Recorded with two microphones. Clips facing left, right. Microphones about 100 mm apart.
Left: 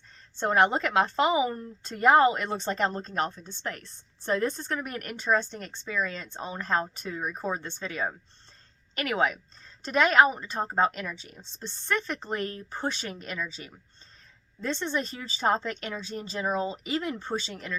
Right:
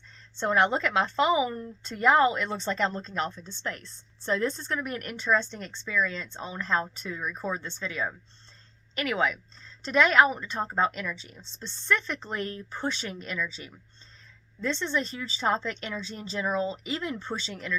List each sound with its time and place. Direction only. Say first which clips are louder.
0.3 s a woman's voice: left 1 dB; 45° left (ahead or behind)